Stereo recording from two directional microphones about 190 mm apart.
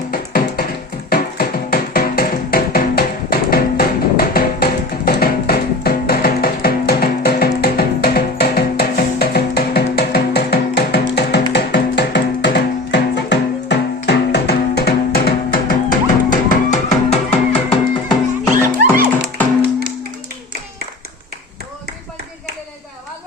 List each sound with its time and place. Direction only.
0.1 s music: 50° left (ahead or behind); by 18.2 s 30° left (ahead or behind)